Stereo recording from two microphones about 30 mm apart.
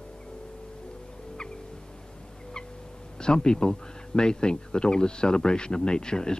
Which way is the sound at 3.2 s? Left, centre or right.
Left.